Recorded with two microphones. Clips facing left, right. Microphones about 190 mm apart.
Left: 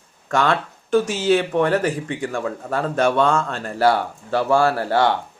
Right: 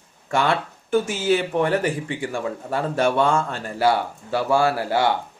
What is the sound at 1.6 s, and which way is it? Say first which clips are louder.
Speech: left 2 dB; 15° right (ahead or behind).